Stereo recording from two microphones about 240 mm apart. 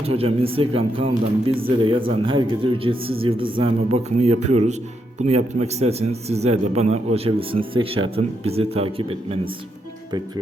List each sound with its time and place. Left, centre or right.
0.0 s a man's voice: right